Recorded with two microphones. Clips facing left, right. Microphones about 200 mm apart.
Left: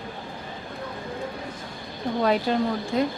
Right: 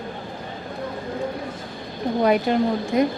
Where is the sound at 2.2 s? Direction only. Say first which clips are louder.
Right 4 dB; 15° right (ahead or behind).